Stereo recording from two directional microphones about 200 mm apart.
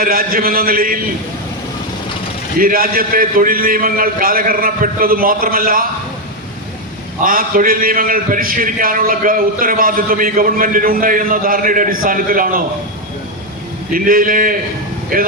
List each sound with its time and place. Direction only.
0.0 s a man's voice: 45° right (ahead or behind)
2.6 s a man's voice: 45° right (ahead or behind)
7.2 s a man's voice: 45° right (ahead or behind)
13.9 s a man's voice: 45° right (ahead or behind)